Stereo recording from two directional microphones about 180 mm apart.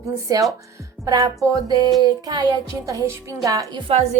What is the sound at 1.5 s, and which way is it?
A woman's voice, 20° right (ahead or behind).